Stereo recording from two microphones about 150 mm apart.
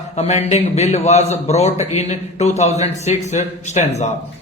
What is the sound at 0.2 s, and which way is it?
Speech, 45° left (ahead or behind).